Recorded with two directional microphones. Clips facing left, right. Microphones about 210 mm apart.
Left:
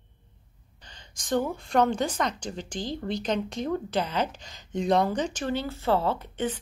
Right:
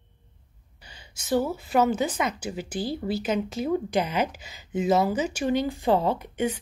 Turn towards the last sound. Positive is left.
turn(degrees=-10)  # may be behind; listen again after turning